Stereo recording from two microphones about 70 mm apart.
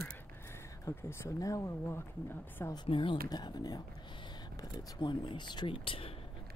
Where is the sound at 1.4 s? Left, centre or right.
Left.